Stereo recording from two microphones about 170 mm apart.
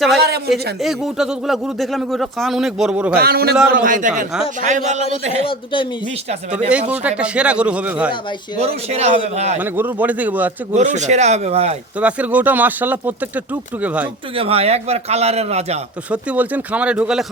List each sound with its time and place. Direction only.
0.2 s a sound: 70° right (ahead or behind)
0.5 s speech: centre (ahead or behind)
3.2 s a man's voice: 65° right (ahead or behind)
3.7 s a man's voice: 55° right (ahead or behind)
5.5 s speech: 30° left (ahead or behind)
6.7 s speech: 5° right (ahead or behind)
8.5 s a man's voice: 40° right (ahead or behind)
9.6 s speech: 10° right (ahead or behind)
10.8 s a man's voice: 45° right (ahead or behind)
11.9 s speech: 10° right (ahead or behind)
14.3 s a man's voice: 35° right (ahead or behind)
16.1 s speech: 10° right (ahead or behind)